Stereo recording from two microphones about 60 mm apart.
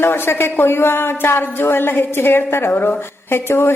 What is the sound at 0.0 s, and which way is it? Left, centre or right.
Speech, left.